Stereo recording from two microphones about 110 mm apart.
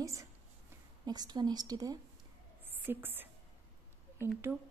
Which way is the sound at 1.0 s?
40° right (ahead or behind).